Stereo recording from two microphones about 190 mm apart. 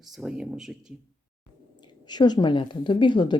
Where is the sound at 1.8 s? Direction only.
20° left (ahead or behind).